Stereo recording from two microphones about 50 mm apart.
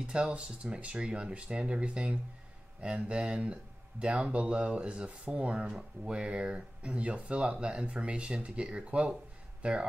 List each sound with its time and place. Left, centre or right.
0.3 s speech: right